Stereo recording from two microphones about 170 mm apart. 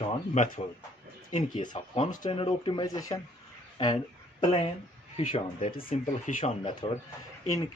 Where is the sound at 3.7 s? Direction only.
25° left (ahead or behind).